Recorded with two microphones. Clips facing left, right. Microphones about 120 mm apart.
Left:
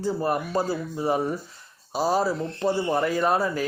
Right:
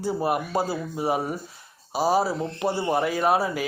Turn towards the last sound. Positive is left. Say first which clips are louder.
# even
turn(degrees=-5)  # may be behind; listen again after turning